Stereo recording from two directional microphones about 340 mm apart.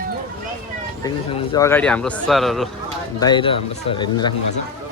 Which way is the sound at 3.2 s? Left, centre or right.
Centre.